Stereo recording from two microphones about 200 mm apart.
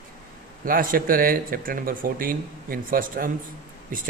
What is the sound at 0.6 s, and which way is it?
A man's voice, 45° right (ahead or behind).